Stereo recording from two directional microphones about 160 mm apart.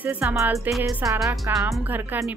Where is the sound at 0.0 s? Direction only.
10° right (ahead or behind).